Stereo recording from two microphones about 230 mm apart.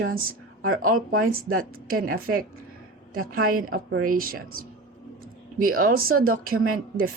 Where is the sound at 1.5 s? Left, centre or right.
Right.